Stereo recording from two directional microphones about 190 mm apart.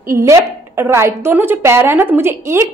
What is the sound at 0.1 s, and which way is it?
A woman's voice, 15° right (ahead or behind).